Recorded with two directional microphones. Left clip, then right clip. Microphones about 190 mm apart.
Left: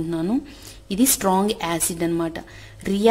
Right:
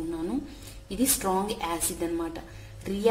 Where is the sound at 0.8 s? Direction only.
50° left (ahead or behind).